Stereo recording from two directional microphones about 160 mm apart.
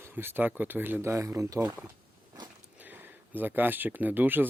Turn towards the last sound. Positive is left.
turn(degrees=-10)  # may be behind; listen again after turning